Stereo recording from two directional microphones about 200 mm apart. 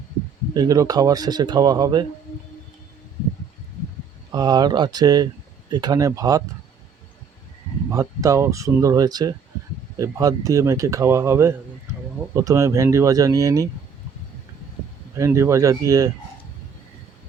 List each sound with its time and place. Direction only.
0.5 s speech: 20° right (ahead or behind)
4.3 s speech: 20° right (ahead or behind)
7.9 s speech: 15° right (ahead or behind)
15.2 s speech: 15° right (ahead or behind)